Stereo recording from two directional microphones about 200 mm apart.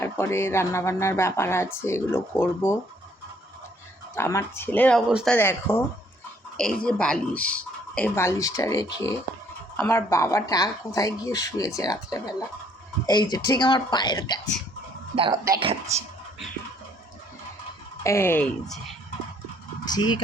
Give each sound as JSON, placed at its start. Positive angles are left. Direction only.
{"t": 0.0, "sound": "speech", "side_deg": 10}
{"t": 4.1, "sound": "speech", "side_deg": 15}
{"t": 5.3, "sound": "speech", "side_deg": 10}
{"t": 15.1, "sound": "speech", "side_deg": -25}
{"t": 18.0, "sound": "speech", "side_deg": 15}
{"t": 19.8, "sound": "speech", "side_deg": 20}